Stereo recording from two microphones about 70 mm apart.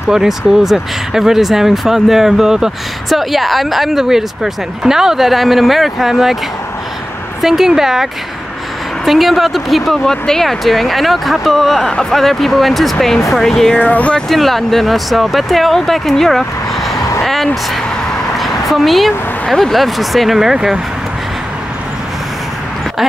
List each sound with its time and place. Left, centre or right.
0.1 s speech: centre
7.4 s speech: centre
13.7 s speech: left
14.3 s speech: centre
17.2 s vehicle: centre
18.4 s a sound: centre
19.4 s speech: centre